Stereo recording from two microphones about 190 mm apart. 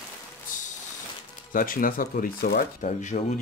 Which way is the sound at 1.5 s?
45° left (ahead or behind).